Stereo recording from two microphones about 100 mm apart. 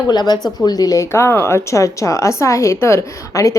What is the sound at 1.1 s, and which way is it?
A woman's voice, 25° left (ahead or behind).